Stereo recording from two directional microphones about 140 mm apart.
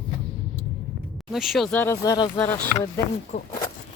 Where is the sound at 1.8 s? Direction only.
20° left (ahead or behind).